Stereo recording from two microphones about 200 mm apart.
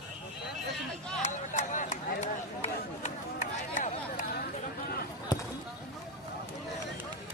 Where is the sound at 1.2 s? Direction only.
40° left (ahead or behind).